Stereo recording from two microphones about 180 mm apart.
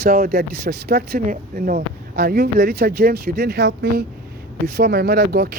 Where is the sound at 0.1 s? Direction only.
55° right (ahead or behind).